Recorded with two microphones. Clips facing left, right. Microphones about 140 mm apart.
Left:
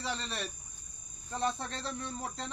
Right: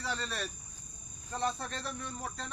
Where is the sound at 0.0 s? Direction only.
25° left (ahead or behind).